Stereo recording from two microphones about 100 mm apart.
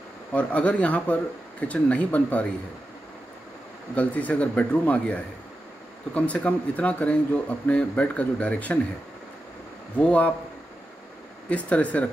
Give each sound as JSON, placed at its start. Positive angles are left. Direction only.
{"t": 0.3, "sound": "a man's voice", "side_deg": 15}
{"t": 3.9, "sound": "a man's voice", "side_deg": 15}
{"t": 9.9, "sound": "a man's voice", "side_deg": 15}
{"t": 11.4, "sound": "a man's voice", "side_deg": 15}